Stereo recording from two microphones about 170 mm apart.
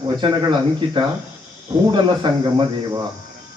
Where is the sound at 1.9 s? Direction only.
25° right (ahead or behind).